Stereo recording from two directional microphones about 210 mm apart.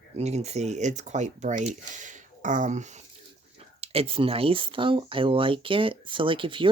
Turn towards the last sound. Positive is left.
turn(degrees=-25)  # may be behind; listen again after turning